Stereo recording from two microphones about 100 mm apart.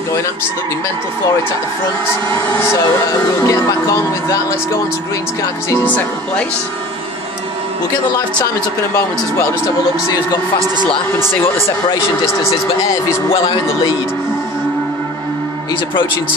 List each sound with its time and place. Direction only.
3.4 s speech: 35° left (ahead or behind)